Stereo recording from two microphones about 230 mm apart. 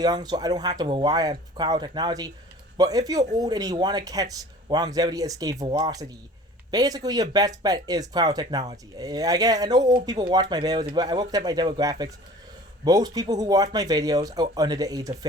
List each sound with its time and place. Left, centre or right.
0.0 s speech: centre